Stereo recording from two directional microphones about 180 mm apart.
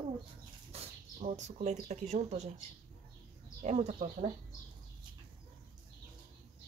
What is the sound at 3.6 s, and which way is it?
Speech, 40° right (ahead or behind).